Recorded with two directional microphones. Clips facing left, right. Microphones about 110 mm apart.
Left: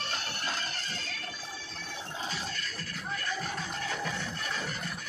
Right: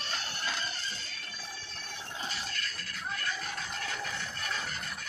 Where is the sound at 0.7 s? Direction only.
85° left.